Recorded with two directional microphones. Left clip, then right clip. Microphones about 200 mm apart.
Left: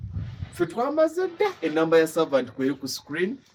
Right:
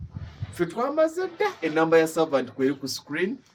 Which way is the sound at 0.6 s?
25° left (ahead or behind).